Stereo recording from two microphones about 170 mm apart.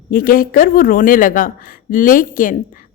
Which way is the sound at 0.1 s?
55° left (ahead or behind).